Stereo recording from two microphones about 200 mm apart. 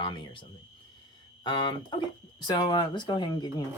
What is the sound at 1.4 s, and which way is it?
Speech, 25° left (ahead or behind).